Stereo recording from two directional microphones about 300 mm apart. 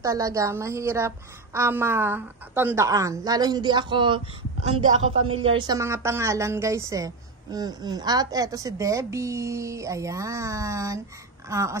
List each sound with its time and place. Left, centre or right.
0.0 s a woman's voice: centre
5.3 s a woman's voice: centre